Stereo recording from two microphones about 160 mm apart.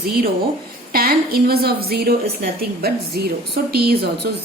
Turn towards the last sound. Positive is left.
turn(degrees=-80)